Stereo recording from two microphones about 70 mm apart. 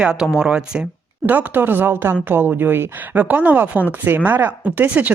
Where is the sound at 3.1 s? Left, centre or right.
Right.